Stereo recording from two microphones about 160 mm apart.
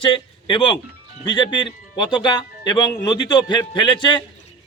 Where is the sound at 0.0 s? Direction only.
30° left (ahead or behind).